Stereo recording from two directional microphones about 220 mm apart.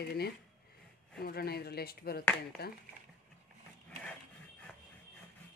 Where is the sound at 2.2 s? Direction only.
5° left (ahead or behind).